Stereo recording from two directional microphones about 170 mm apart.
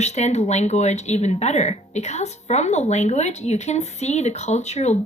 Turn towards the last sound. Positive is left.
turn(degrees=40)  # may be behind; listen again after turning